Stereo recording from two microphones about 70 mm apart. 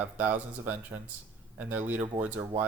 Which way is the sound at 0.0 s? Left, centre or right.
Right.